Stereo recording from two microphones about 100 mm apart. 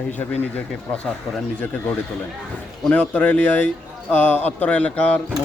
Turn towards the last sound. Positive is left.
turn(degrees=10)  # may be behind; listen again after turning